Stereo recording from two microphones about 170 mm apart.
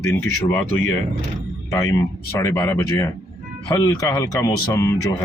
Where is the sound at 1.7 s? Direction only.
20° left (ahead or behind).